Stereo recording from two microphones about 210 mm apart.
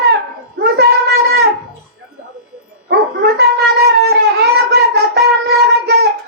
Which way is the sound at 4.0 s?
50° right (ahead or behind).